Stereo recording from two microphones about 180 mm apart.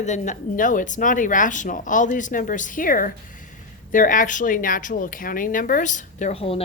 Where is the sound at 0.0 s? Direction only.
40° left (ahead or behind).